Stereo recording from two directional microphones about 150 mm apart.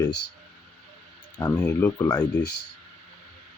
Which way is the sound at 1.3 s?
15° left (ahead or behind).